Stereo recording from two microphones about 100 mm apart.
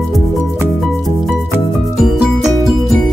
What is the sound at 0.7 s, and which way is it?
Music, centre (ahead or behind).